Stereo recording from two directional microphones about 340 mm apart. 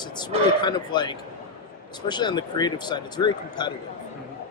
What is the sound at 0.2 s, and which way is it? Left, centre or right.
A man's voice, centre.